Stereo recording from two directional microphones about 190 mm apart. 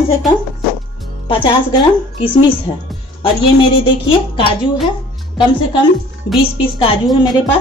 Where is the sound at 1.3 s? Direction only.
25° left (ahead or behind).